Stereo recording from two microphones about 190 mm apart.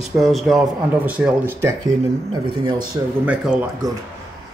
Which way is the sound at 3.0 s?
15° right (ahead or behind).